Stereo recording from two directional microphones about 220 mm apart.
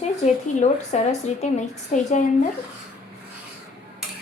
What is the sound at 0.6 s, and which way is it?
A woman's voice, 30° left (ahead or behind).